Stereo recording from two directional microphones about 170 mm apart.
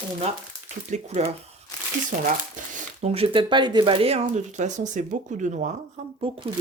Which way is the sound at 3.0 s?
35° right (ahead or behind).